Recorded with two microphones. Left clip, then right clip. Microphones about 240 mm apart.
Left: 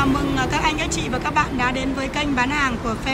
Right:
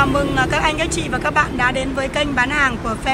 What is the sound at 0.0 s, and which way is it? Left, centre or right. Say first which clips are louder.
A woman's voice: right 4 dB; centre.